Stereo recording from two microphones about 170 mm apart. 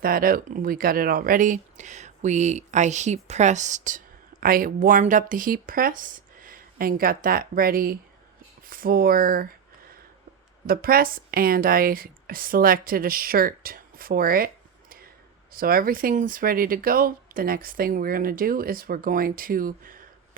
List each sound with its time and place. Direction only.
0.0 s speech: 60° right (ahead or behind)
8.6 s a sound: 55° right (ahead or behind)
10.7 s a woman's voice: 60° right (ahead or behind)